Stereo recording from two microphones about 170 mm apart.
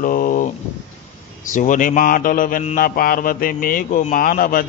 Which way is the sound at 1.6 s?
50° left (ahead or behind).